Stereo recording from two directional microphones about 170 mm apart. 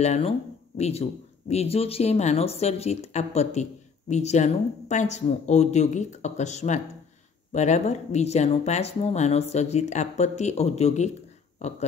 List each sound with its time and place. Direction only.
0.0 s speech: 40° left (ahead or behind)